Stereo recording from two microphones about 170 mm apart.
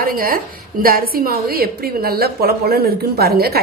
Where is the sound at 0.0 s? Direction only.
55° right (ahead or behind).